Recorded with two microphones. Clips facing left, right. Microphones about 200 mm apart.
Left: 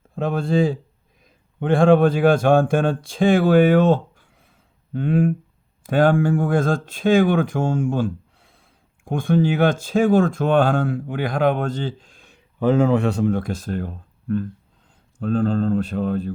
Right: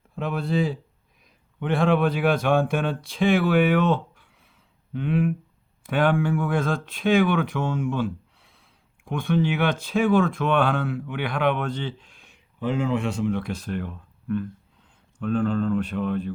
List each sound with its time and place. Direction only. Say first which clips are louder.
0.2 s speech: left 5 dB; 45° left (ahead or behind)
13.1 s speech: left 5 dB; 55° left (ahead or behind); by 16.3 s 40° left (ahead or behind)